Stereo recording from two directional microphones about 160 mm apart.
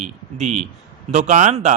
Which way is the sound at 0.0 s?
45° right (ahead or behind).